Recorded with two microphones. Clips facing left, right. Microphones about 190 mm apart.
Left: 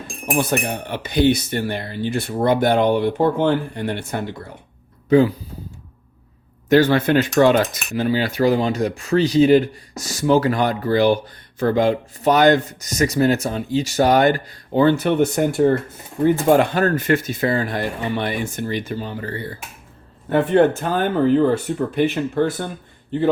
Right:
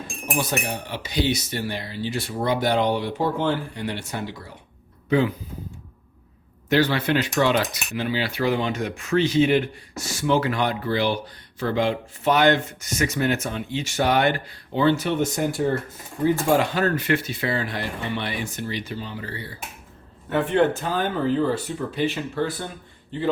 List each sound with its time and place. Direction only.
0.3 s speech: 55° left (ahead or behind)
5.0 s speech: 40° left (ahead or behind)
6.7 s cutlery: 45° left (ahead or behind)
16.2 s speech: 55° left (ahead or behind)